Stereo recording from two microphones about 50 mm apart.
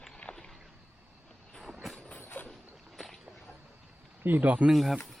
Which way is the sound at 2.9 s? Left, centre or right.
Centre.